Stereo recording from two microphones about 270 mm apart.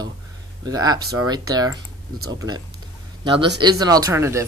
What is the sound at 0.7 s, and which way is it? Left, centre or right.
Speech, centre.